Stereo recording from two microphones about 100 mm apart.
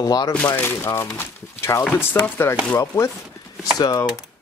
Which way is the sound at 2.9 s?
30° left (ahead or behind).